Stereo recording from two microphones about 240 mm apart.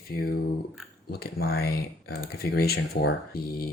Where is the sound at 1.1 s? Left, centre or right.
Left.